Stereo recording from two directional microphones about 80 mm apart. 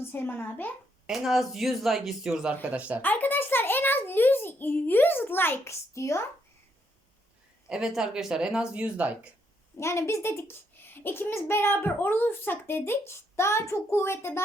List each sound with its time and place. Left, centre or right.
0.0 s a child's voice: left
1.0 s speech: centre
3.0 s a child's voice: left
7.7 s speech: centre
9.7 s a child's voice: left